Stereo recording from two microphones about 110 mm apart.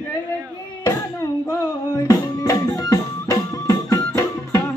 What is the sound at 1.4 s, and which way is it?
Music, 35° left (ahead or behind).